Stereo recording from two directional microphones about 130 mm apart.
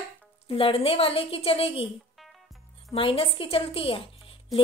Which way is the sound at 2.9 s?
45° left (ahead or behind).